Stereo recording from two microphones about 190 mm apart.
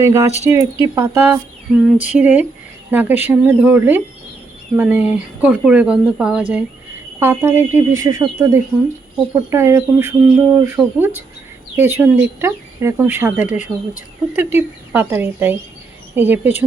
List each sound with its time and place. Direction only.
0.0 s a woman's voice: 15° right (ahead or behind)